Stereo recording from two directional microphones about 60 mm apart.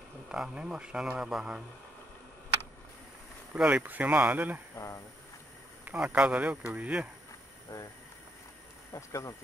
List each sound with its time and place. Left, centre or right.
0.3 s a man's voice: centre
3.5 s speech: centre
3.8 s speech: right
4.7 s speech: left
6.1 s speech: right
7.7 s speech: left
8.9 s speech: left